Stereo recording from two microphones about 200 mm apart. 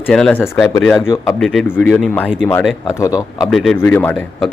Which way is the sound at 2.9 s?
15° left (ahead or behind).